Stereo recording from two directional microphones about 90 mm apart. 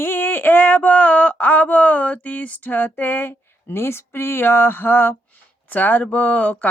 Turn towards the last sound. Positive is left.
turn(degrees=15)  # may be behind; listen again after turning